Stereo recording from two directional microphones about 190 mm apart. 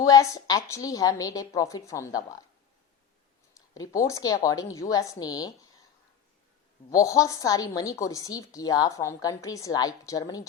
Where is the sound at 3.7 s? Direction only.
15° left (ahead or behind).